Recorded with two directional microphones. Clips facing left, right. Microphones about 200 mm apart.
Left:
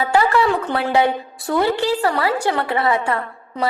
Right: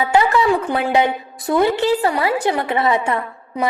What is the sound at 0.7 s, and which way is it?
A woman's voice, 15° right (ahead or behind).